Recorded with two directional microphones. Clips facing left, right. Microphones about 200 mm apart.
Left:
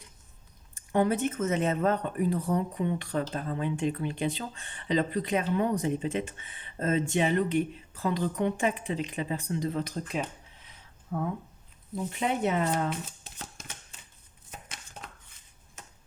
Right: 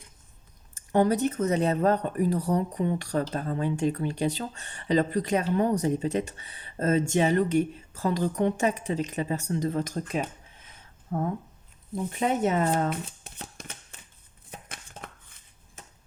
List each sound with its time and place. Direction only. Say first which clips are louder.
0.9 s speech: right 3 dB; 35° right (ahead or behind)
12.2 s speech: right 3 dB; 45° right (ahead or behind)